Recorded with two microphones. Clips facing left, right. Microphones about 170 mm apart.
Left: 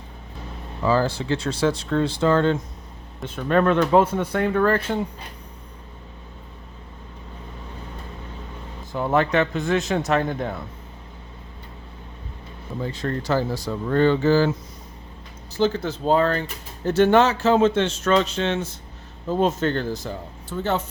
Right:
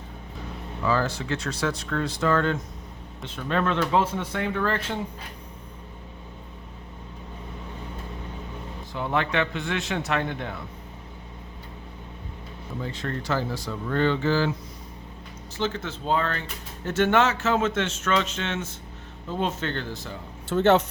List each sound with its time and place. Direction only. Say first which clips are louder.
0.8 s speech: left 4 dB; 30° left (ahead or behind)
3.2 s speech: left 6 dB; 50° left (ahead or behind)
8.9 s speech: left 6 dB; 45° left (ahead or behind)
12.8 s speech: left 5 dB; 35° left (ahead or behind)
15.5 s speech: left 7 dB; 35° left (ahead or behind)
20.5 s speech: right 6 dB; 85° right